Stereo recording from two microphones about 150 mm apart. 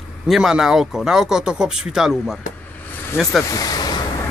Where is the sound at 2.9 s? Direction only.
15° left (ahead or behind).